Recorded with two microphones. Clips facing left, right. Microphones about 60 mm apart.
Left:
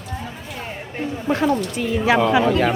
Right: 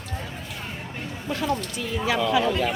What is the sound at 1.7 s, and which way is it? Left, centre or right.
Speech, left.